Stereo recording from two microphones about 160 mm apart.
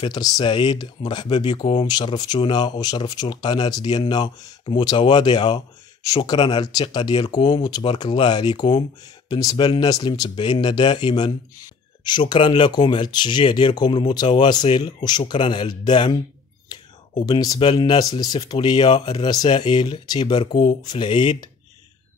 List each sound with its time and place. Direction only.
0.0 s speech: 25° left (ahead or behind)
16.7 s whispering: 25° left (ahead or behind)
17.3 s speech: 25° left (ahead or behind)